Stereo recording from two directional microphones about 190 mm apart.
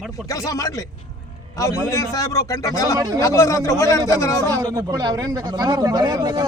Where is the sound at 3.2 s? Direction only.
15° left (ahead or behind).